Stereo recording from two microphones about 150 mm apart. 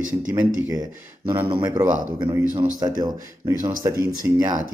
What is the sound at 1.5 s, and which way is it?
Speech, 25° right (ahead or behind).